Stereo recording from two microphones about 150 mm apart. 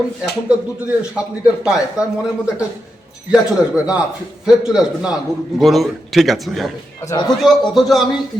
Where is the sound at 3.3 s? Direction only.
5° right (ahead or behind).